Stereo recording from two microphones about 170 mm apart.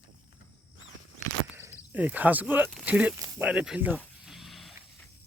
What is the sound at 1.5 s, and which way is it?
Cricket, 10° right (ahead or behind).